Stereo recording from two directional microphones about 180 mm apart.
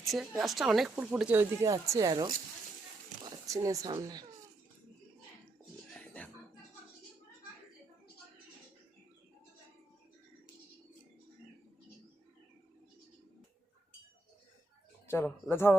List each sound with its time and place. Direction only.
0.0 s speech: centre (ahead or behind); by 4.3 s 20° right (ahead or behind)
5.9 s a sound: 10° left (ahead or behind)
15.0 s speech: 15° left (ahead or behind)